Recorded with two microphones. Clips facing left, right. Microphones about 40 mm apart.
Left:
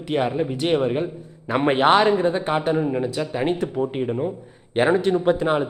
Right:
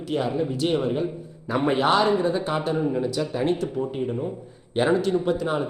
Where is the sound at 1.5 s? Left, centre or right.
Left.